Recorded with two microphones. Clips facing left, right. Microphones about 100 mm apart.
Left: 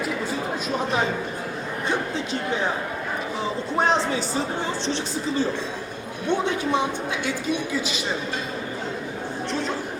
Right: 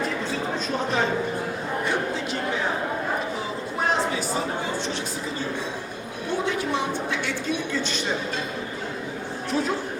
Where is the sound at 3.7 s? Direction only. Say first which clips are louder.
Left 3 dB; 30° left (ahead or behind).